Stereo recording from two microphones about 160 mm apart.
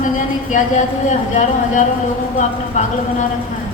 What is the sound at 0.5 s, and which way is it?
A woman's voice, 50° left (ahead or behind).